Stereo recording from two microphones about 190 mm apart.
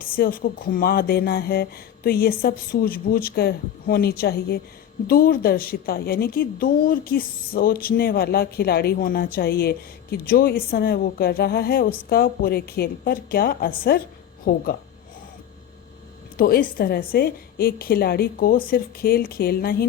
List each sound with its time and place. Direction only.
0.0 s a woman's voice: 50° left (ahead or behind)
16.4 s a woman's voice: 50° left (ahead or behind)